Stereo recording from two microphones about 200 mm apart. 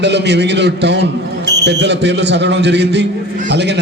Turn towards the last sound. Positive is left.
turn(degrees=-60)  # may be behind; listen again after turning